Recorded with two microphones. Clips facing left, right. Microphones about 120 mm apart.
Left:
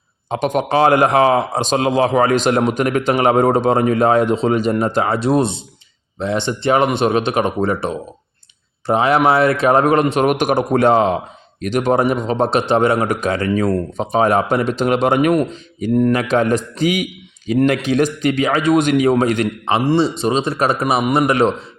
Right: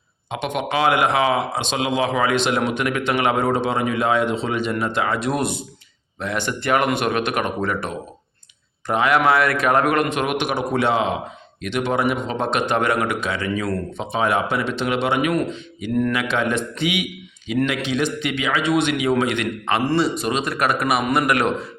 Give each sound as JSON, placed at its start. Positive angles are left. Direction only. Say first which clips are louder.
{"t": 0.3, "sound": "speech", "louder": "left 6 dB", "side_deg": 40}